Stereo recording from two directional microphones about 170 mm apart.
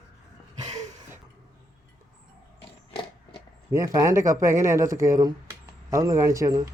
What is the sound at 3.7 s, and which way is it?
Speech, 20° right (ahead or behind).